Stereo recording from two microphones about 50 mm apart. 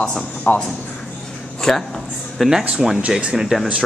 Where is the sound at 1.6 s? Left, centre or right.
Centre.